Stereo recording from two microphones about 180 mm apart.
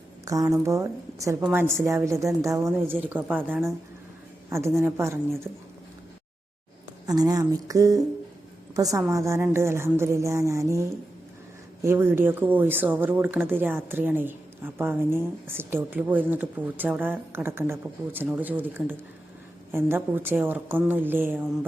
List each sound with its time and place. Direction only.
0.3 s a woman's voice: 20° right (ahead or behind)
7.1 s a woman's voice: 20° right (ahead or behind)